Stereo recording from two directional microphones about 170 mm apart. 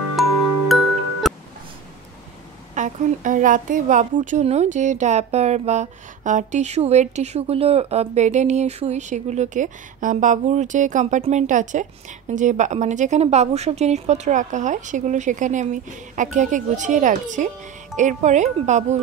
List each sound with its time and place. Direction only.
0.7 s music: centre (ahead or behind)
2.7 s a woman's voice: 45° right (ahead or behind)